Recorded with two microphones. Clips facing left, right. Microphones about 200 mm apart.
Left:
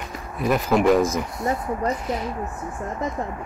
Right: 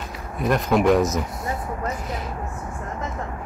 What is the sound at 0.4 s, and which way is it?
Speech, centre (ahead or behind).